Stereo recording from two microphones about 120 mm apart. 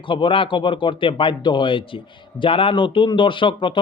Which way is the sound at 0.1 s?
45° left (ahead or behind).